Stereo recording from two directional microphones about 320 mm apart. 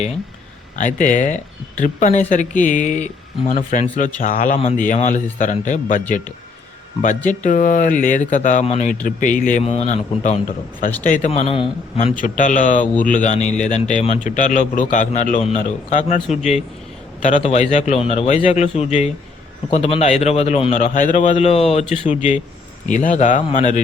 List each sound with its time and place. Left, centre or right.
0.8 s a man's voice: left